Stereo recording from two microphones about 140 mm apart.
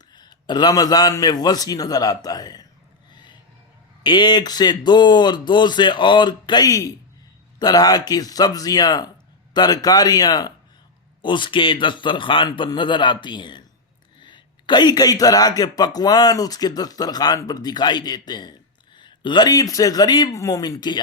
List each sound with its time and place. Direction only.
0.1 s speech: 30° left (ahead or behind)
3.1 s a sound: 30° left (ahead or behind)
4.0 s speech: 30° left (ahead or behind)